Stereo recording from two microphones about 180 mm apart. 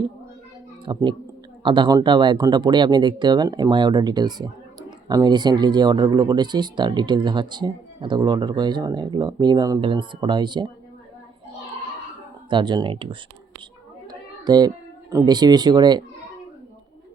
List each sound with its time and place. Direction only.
0.9 s speech: 25° right (ahead or behind)
12.5 s speech: 25° right (ahead or behind)
14.1 s a sound: 25° right (ahead or behind)
15.1 s speech: 20° right (ahead or behind)